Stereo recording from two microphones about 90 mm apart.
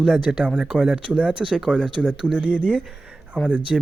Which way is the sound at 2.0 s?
15° right (ahead or behind).